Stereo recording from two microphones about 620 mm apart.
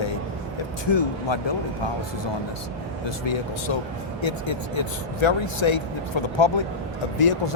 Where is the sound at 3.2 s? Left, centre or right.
Left.